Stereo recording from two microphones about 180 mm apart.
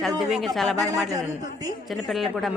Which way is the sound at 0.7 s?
20° right (ahead or behind).